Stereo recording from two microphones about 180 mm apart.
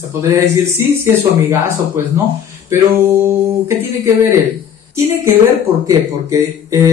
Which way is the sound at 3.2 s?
15° right (ahead or behind).